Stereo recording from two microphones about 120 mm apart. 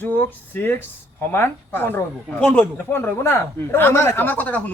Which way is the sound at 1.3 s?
20° left (ahead or behind).